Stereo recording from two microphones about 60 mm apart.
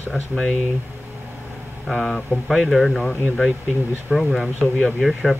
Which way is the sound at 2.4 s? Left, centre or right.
Centre.